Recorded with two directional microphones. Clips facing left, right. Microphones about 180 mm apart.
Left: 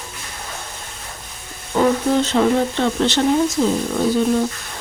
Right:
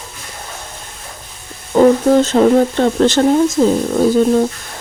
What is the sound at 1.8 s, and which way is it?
Speech, 45° right (ahead or behind).